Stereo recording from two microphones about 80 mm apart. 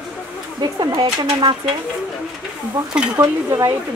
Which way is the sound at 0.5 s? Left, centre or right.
Right.